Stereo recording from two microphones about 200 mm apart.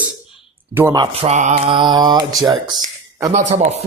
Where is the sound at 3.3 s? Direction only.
35° right (ahead or behind).